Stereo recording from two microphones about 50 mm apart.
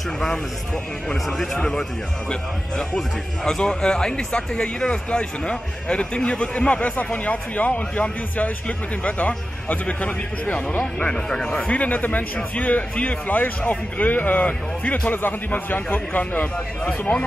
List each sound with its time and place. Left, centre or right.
1.6 s speech: centre
3.4 s speech: centre; by 10.8 s left
11.1 s speech: centre
11.6 s a man's voice: left